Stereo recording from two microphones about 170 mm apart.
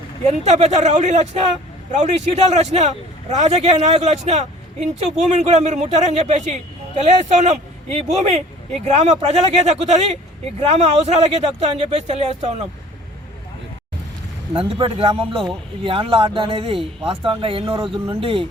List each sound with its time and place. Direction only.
0.3 s a man's voice: 40° right (ahead or behind)
14.5 s a man's voice: 30° right (ahead or behind)